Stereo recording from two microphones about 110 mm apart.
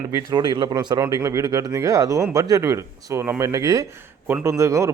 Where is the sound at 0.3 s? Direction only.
40° right (ahead or behind).